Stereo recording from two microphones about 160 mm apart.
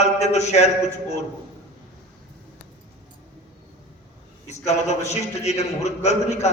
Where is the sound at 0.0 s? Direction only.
45° left (ahead or behind).